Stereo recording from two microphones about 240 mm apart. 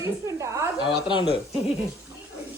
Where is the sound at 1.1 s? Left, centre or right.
Centre.